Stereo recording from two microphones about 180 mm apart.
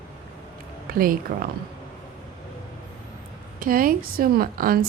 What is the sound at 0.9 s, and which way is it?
Speech, 55° right (ahead or behind).